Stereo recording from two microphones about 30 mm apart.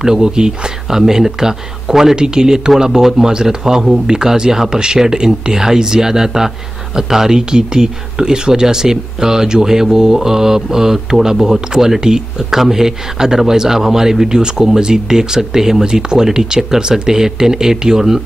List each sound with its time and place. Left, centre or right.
0.0 s speech: right
2.1 s speech: right
12.4 s speech: centre